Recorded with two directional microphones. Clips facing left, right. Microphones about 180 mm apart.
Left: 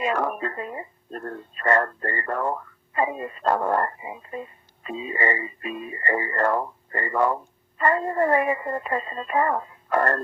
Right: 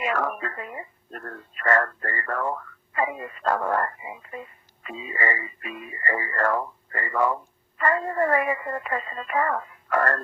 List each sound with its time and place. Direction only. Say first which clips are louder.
0.0 s speech: left 2 dB; 25° left (ahead or behind)